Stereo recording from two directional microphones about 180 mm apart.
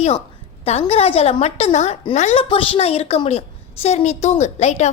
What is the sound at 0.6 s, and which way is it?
A woman's voice, 35° left (ahead or behind).